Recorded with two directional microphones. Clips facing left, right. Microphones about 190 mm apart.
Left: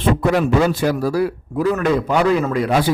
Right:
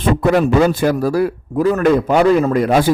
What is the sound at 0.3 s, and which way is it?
A man's voice, 50° right (ahead or behind).